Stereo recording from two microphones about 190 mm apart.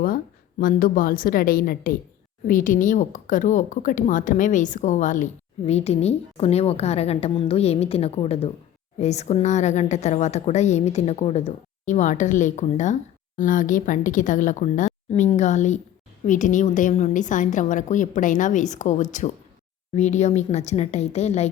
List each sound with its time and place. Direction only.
0.6 s a woman's voice: 45° left (ahead or behind)